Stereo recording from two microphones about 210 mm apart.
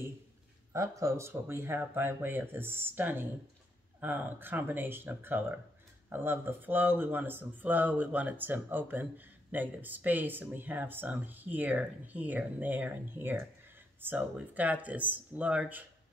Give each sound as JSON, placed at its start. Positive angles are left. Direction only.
{"t": 0.7, "sound": "speech", "side_deg": -15}